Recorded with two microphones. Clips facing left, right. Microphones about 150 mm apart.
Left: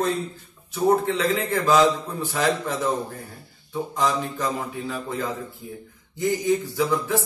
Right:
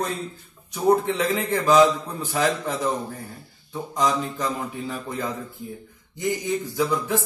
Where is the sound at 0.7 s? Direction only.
15° right (ahead or behind).